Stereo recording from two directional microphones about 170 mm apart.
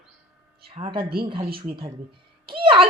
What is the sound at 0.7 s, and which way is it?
Speech, 30° right (ahead or behind).